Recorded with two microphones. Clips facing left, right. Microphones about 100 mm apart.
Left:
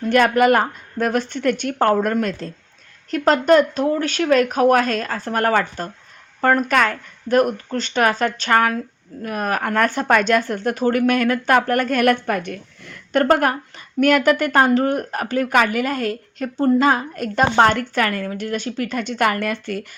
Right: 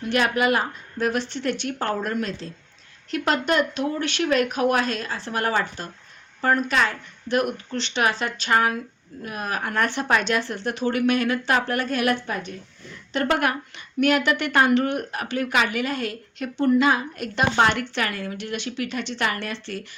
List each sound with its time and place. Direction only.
0.0 s a woman's voice: 45° left (ahead or behind); by 13.2 s 65° left (ahead or behind)
13.2 s a woman's voice: 40° left (ahead or behind)